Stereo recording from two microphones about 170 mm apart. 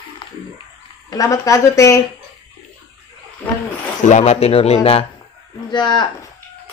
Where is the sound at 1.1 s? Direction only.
20° left (ahead or behind).